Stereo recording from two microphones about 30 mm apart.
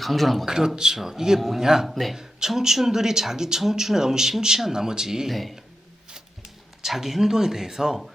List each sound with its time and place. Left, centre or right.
0.0 s speech: centre
0.4 s speech: centre
1.9 s speech: centre
2.6 s speech: centre
5.3 s speech: centre
6.1 s a sound: right
6.8 s speech: centre